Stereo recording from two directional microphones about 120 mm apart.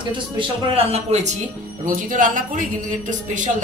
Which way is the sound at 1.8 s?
90° right.